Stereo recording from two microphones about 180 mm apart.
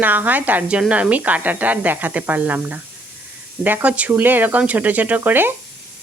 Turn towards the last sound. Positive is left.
turn(degrees=-10)  # may be behind; listen again after turning